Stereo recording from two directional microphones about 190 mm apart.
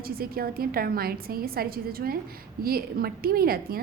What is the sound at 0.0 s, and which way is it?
A woman's voice, 50° right (ahead or behind).